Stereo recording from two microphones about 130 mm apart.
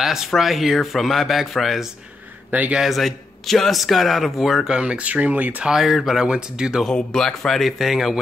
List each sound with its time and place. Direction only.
0.0 s a man's voice: centre (ahead or behind)
6.9 s a man's voice: 5° left (ahead or behind)